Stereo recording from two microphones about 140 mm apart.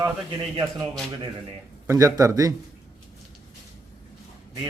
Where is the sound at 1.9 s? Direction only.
25° right (ahead or behind).